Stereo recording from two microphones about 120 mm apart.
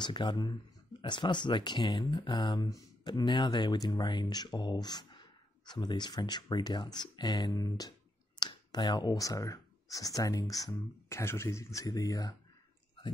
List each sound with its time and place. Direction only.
0.0 s speech: 40° left (ahead or behind)